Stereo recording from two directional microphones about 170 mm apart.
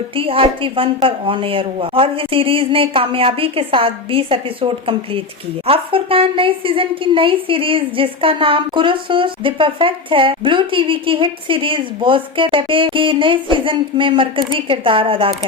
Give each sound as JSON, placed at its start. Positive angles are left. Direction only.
{"t": 0.2, "sound": "a woman's voice", "side_deg": -30}